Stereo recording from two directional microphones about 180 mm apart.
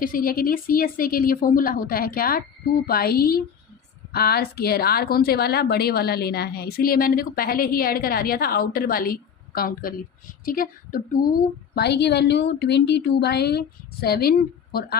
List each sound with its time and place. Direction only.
0.0 s a woman's voice: 50° left (ahead or behind)
11.7 s a woman's voice: 65° left (ahead or behind)